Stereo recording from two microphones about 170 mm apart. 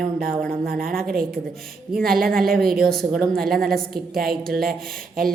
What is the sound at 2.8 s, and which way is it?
Speech, centre (ahead or behind).